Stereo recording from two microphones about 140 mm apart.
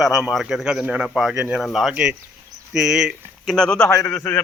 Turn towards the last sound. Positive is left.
turn(degrees=10)  # may be behind; listen again after turning